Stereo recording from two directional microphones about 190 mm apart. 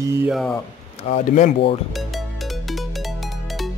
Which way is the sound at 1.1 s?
40° left (ahead or behind).